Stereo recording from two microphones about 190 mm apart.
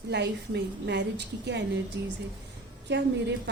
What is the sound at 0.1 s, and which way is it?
A woman's voice, 65° right (ahead or behind).